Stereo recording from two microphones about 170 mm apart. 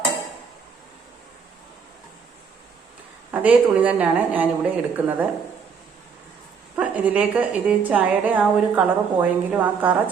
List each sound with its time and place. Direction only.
3.3 s a woman's voice: 10° right (ahead or behind)
6.7 s a woman's voice: 10° right (ahead or behind)